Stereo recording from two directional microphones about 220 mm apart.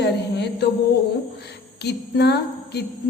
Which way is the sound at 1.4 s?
50° left (ahead or behind).